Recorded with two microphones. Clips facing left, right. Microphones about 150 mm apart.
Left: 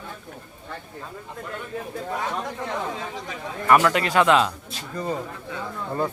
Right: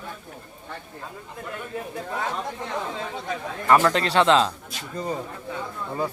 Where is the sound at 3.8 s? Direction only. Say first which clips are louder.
Even; 30° right (ahead or behind).